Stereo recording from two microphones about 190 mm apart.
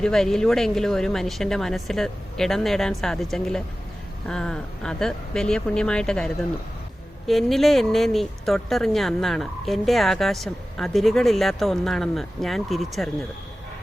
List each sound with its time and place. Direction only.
0.0 s speech: centre (ahead or behind)